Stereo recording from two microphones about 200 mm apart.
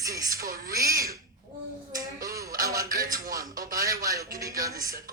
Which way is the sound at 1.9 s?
15° right (ahead or behind).